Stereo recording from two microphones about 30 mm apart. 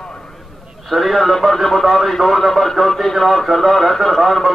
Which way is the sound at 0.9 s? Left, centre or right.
Centre.